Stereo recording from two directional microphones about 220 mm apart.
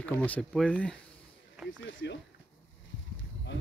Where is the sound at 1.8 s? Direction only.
60° left (ahead or behind).